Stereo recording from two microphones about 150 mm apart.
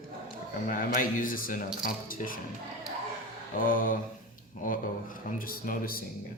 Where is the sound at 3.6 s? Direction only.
65° left (ahead or behind).